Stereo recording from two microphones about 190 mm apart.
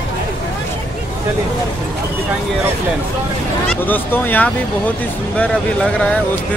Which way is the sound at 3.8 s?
10° left (ahead or behind).